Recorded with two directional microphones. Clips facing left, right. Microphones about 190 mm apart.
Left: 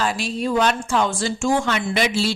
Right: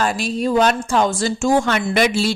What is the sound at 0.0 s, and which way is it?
A woman's voice, 45° right (ahead or behind).